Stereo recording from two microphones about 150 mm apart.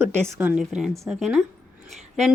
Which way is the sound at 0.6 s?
Centre (ahead or behind).